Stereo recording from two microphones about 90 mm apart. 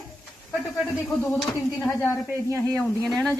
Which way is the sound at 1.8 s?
25° left (ahead or behind).